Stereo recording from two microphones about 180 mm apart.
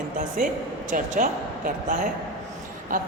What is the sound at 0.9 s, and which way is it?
A woman's voice, 45° right (ahead or behind).